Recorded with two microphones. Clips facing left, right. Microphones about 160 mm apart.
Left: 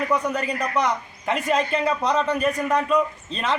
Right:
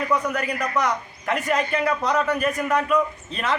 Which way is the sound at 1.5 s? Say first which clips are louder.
Left 1 dB; 15° left (ahead or behind).